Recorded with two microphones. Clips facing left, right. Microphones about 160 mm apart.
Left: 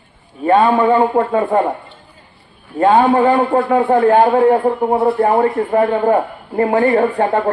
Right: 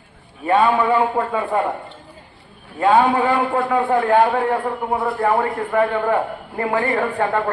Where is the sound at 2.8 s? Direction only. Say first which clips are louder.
Left 3 dB; 35° left (ahead or behind).